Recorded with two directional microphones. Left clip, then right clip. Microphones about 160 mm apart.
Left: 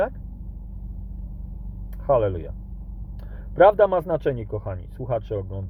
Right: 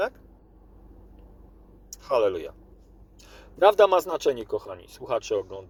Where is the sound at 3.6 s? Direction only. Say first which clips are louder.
Left 2 dB; 15° right (ahead or behind).